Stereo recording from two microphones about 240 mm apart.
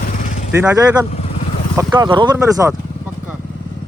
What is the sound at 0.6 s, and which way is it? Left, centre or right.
A man's voice, centre.